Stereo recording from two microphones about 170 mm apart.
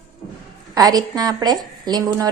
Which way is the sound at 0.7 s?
20° right (ahead or behind).